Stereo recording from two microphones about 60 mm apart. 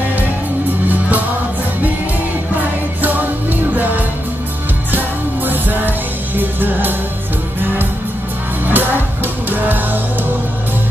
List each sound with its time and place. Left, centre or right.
3.0 s music: right
8.6 s music: right